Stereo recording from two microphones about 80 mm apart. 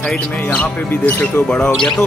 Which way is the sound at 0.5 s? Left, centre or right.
Centre.